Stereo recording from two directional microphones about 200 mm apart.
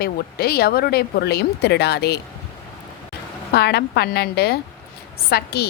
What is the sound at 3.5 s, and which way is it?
A woman's voice, 55° left (ahead or behind).